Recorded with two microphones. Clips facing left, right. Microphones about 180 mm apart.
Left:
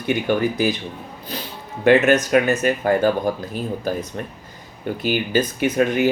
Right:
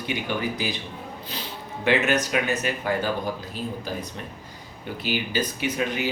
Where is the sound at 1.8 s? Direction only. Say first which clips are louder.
Left 8 dB; 50° left (ahead or behind).